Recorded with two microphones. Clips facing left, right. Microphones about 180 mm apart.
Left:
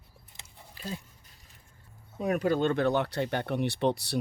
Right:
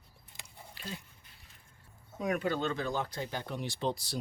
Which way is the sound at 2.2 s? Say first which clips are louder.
Left 5 dB; 40° left (ahead or behind).